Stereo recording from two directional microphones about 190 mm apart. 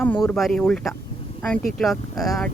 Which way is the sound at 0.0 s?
10° left (ahead or behind).